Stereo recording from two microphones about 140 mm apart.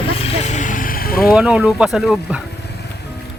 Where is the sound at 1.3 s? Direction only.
5° right (ahead or behind).